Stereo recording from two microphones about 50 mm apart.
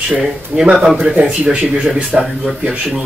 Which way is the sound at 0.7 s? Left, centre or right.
Centre.